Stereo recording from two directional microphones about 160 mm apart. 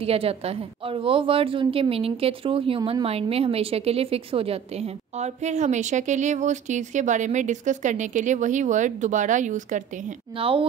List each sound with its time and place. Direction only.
0.0 s a woman's voice: 40° right (ahead or behind)
10.3 s a woman's voice: 35° right (ahead or behind)